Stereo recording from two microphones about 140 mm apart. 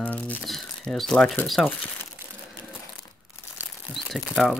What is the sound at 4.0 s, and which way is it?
Speech, centre (ahead or behind).